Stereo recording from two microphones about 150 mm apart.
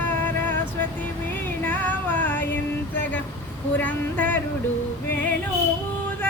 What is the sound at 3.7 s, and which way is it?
Music, 10° left (ahead or behind).